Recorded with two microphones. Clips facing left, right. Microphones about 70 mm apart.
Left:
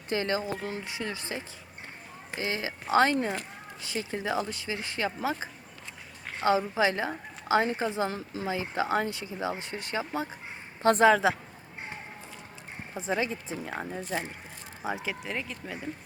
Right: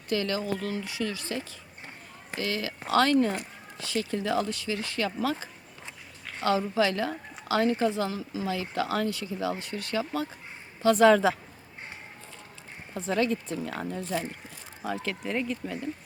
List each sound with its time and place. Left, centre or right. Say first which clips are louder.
0.1 s speech: right 1 dB; left
8.1 s speech: right 2 dB; left
8.4 s speech: left 1 dB; left
11.1 s speech: right 2 dB; centre
12.9 s speech: right 3 dB; centre
15.2 s speech: right 5 dB; centre